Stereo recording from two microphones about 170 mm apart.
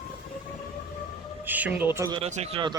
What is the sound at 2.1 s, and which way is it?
Speech, 40° right (ahead or behind).